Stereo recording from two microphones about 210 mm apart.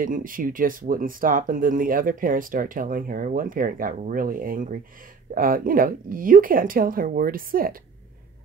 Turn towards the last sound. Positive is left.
turn(degrees=-45)  # may be behind; listen again after turning